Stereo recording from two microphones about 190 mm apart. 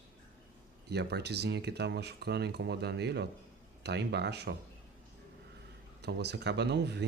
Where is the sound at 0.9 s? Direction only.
60° right (ahead or behind).